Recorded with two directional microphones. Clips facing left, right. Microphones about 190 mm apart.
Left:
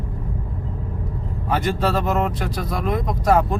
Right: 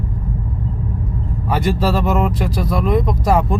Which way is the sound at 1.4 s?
Centre (ahead or behind).